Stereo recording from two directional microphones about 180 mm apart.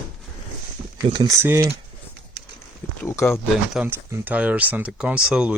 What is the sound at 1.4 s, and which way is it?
Speech, 15° right (ahead or behind).